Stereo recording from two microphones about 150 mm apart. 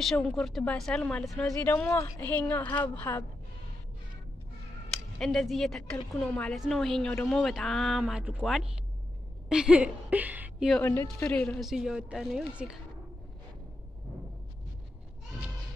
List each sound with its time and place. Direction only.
0.0 s a woman's voice: centre (ahead or behind)
5.2 s a woman's voice: centre (ahead or behind)
10.8 s a woman's voice: 15° left (ahead or behind); by 12.7 s 5° right (ahead or behind)